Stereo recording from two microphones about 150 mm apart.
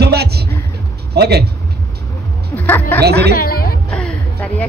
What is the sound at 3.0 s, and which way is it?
Speech, 90° right.